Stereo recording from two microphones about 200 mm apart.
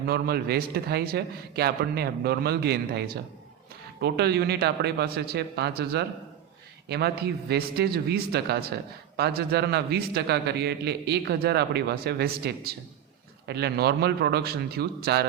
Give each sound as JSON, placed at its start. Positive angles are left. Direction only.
{"t": 0.1, "sound": "a man's voice", "side_deg": -50}